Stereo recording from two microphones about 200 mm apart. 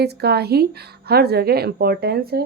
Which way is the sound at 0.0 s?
55° right (ahead or behind).